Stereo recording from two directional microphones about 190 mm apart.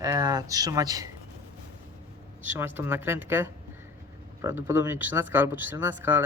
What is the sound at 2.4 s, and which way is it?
A woman's voice, 10° right (ahead or behind).